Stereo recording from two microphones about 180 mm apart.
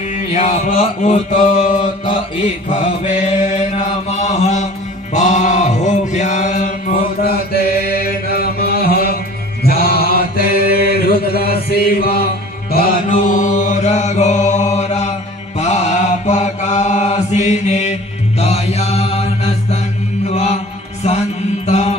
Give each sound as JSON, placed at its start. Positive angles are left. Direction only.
{"t": 0.1, "sound": "mantra", "side_deg": 45}
{"t": 3.0, "sound": "mantra", "side_deg": 40}
{"t": 7.2, "sound": "chant", "side_deg": 55}
{"t": 9.6, "sound": "mantra", "side_deg": 60}
{"t": 21.7, "sound": "mantra", "side_deg": 35}